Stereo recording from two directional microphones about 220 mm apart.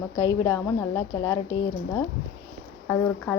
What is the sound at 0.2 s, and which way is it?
Speech, 15° left (ahead or behind).